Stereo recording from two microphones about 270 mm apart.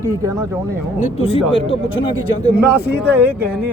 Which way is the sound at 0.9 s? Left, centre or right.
Left.